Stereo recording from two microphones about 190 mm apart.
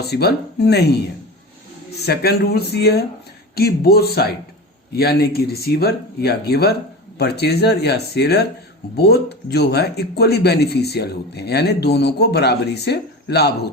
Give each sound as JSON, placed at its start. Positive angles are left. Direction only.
{"t": 0.0, "sound": "speech", "side_deg": 60}
{"t": 2.0, "sound": "speech", "side_deg": 60}